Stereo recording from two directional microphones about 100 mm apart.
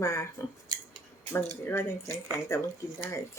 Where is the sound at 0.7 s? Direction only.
45° right (ahead or behind).